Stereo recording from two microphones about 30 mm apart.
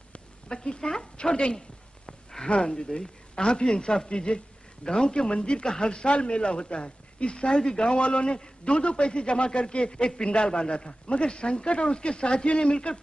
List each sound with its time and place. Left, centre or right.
0.5 s a man's voice: left
2.6 s a man's voice: left